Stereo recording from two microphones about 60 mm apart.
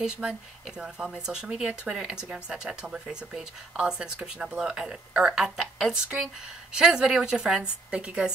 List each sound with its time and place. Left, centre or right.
0.0 s speech: centre